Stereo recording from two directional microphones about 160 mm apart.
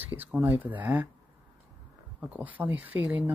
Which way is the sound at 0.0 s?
10° right (ahead or behind).